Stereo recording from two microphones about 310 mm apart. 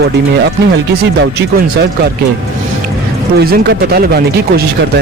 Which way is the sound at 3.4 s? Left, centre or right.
Right.